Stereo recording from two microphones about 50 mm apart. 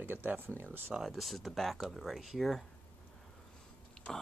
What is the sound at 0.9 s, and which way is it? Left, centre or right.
Speech, centre.